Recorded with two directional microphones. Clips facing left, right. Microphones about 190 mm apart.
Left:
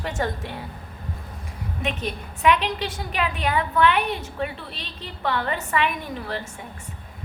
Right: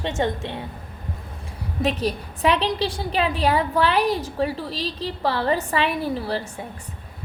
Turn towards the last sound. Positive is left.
turn(degrees=-35)  # may be behind; listen again after turning